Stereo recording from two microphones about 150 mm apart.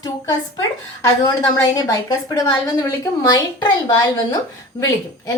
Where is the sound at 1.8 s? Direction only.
25° left (ahead or behind).